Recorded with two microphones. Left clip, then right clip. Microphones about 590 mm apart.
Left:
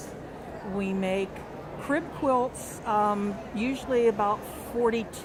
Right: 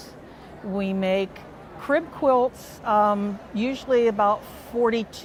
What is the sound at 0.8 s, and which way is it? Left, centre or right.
A woman's voice, right.